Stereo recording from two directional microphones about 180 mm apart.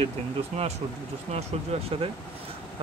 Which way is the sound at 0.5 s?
40° right (ahead or behind).